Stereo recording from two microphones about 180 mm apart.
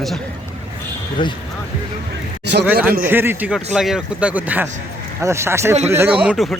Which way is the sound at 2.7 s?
10° right (ahead or behind).